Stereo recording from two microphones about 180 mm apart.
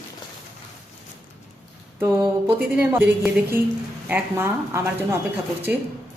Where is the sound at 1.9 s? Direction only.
15° right (ahead or behind).